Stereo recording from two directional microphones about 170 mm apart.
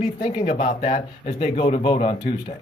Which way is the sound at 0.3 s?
45° left (ahead or behind).